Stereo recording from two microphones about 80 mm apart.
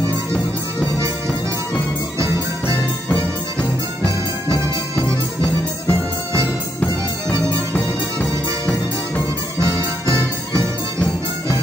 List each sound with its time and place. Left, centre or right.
2.1 s music: right
4.0 s music: right
7.7 s music: centre
9.6 s music: right